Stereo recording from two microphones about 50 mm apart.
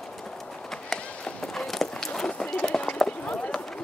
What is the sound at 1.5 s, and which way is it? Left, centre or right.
Walk, centre.